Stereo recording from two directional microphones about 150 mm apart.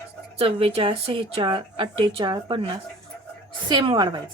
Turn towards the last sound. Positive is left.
turn(degrees=-30)  # may be behind; listen again after turning